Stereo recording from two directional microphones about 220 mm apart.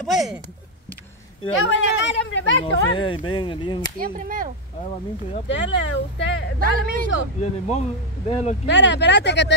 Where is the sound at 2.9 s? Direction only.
20° left (ahead or behind).